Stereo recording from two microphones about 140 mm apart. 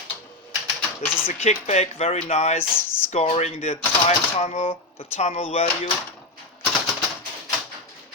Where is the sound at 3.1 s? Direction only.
50° left (ahead or behind).